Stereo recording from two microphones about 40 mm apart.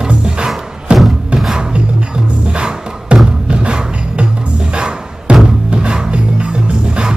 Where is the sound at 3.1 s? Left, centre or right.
Right.